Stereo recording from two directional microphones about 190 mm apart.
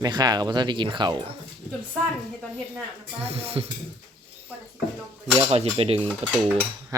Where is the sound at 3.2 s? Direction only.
30° right (ahead or behind).